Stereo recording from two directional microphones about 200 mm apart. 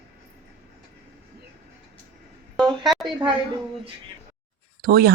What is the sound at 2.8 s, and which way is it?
Speech, centre (ahead or behind).